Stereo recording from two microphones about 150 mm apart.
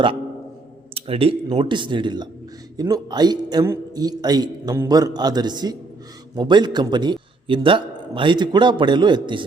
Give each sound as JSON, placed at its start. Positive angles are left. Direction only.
{"t": 0.9, "sound": "a man's voice", "side_deg": -40}